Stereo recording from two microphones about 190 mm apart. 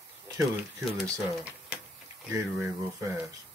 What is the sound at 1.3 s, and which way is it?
Typing, 5° right (ahead or behind).